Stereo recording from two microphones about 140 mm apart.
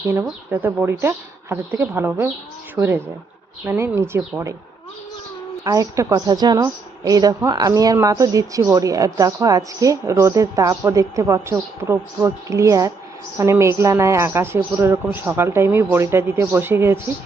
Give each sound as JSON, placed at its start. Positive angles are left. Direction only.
{"t": 0.1, "sound": "a woman's voice", "side_deg": -15}
{"t": 3.7, "sound": "a woman's voice", "side_deg": -15}
{"t": 5.6, "sound": "a woman's voice", "side_deg": -25}